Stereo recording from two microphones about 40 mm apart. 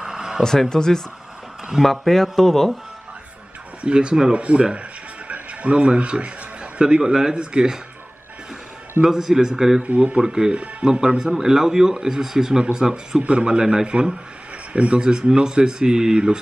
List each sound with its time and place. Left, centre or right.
0.0 s a sound: centre
0.4 s speech: centre
1.8 s speech: centre
3.8 s speech: right
5.3 s a sound: right
7.0 s speech: centre
9.0 s speech: centre
9.8 s speech: right
10.2 s speech: centre
10.5 s speech: right
11.0 s speech: centre
13.2 s speech: right
14.7 s speech: right
15.0 s speech: right